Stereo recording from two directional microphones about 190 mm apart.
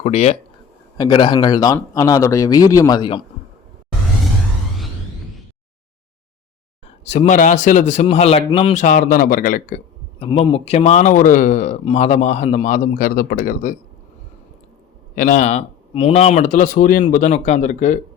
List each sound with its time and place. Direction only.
0.0 s a man's voice: 35° left (ahead or behind)
0.9 s speech: 20° left (ahead or behind)
7.1 s a man's voice: 40° left (ahead or behind)
10.2 s a man's voice: 30° left (ahead or behind); by 13.7 s 45° left (ahead or behind)
15.1 s a man's voice: 45° left (ahead or behind)